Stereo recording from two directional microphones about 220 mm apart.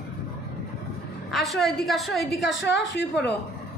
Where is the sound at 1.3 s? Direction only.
Centre (ahead or behind).